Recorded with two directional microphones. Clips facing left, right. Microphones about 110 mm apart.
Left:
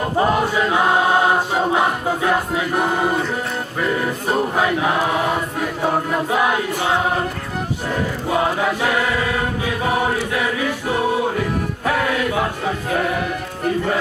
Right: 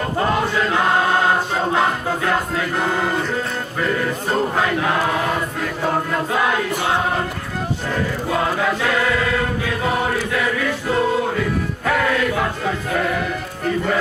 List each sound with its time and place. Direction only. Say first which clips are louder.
0.2 s choir: left 2 dB; 15° left (ahead or behind)
8.3 s chant: left 2 dB; 20° left (ahead or behind)
11.9 s music: right 1 dB; 20° left (ahead or behind)